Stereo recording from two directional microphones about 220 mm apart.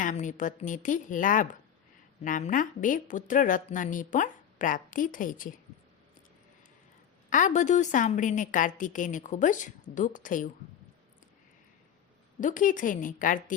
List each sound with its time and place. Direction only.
0.0 s a woman's voice: 35° left (ahead or behind)
7.3 s a woman's voice: 35° left (ahead or behind)
12.4 s a woman's voice: 35° left (ahead or behind)